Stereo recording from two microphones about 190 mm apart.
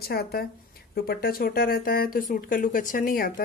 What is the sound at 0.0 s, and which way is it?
Speech, 55° left (ahead or behind).